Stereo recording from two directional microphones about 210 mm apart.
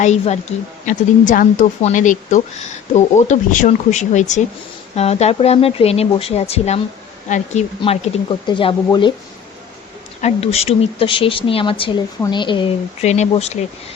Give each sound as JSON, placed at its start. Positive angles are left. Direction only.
{"t": 0.0, "sound": "speech", "side_deg": 35}
{"t": 7.8, "sound": "speech", "side_deg": 25}
{"t": 10.2, "sound": "speech", "side_deg": 30}